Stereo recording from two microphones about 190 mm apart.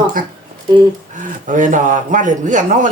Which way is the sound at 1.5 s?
45° right (ahead or behind).